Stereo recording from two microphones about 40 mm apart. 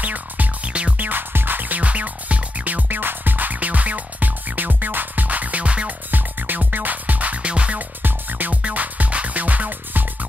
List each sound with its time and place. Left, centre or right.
0.0 s music: right
3.0 s music: right
6.1 s music: right
8.0 s music: right